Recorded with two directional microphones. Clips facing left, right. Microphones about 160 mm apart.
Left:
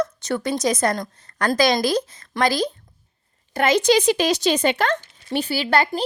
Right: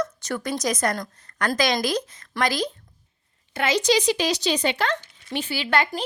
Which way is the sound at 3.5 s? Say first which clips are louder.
Left 4 dB; 50° left (ahead or behind).